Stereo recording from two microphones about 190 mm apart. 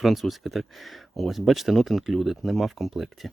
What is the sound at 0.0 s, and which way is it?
Speech, centre (ahead or behind).